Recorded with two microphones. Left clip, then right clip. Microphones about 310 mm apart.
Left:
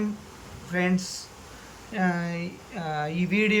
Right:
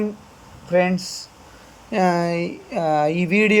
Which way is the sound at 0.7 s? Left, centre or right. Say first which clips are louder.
Right 9 dB; centre.